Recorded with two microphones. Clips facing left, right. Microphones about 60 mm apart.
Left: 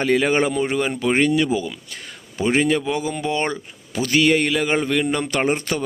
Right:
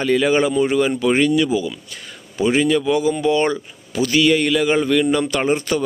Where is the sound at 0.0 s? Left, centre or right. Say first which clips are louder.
Right 2 dB; left.